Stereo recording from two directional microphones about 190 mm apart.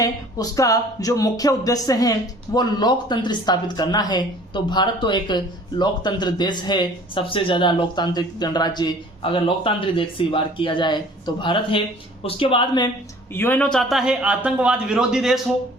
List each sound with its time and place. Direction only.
0.0 s speech: 20° left (ahead or behind)
13.3 s a man's voice: 10° left (ahead or behind)